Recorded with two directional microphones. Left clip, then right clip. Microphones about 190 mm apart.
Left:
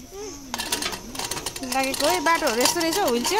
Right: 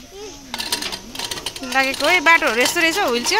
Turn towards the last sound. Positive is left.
turn(degrees=5)  # may be behind; listen again after turning